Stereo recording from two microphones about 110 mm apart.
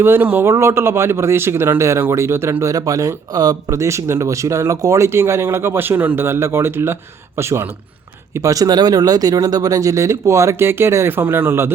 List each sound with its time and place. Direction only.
0.0 s speech: 20° right (ahead or behind)